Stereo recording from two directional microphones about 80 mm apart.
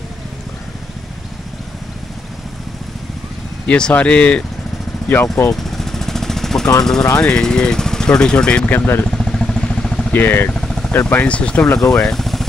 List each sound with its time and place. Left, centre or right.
3.6 s speech: centre
5.0 s speech: left
5.5 s jackhammer: centre
7.2 s speech: centre
9.0 s vehicle: centre
10.1 s speech: left
10.5 s vehicle: centre
10.9 s speech: left; by 12.4 s centre